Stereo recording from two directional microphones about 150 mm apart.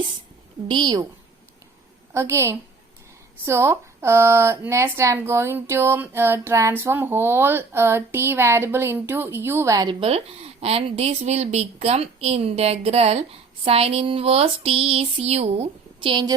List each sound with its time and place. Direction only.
0.7 s a woman's voice: 30° right (ahead or behind)
2.1 s a woman's voice: 20° right (ahead or behind); by 13.2 s 45° right (ahead or behind)
13.7 s a sound: 40° right (ahead or behind)